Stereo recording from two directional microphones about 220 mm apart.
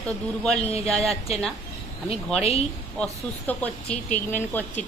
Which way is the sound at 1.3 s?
25° left (ahead or behind).